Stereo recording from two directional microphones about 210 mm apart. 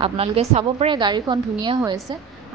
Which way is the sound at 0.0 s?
25° right (ahead or behind).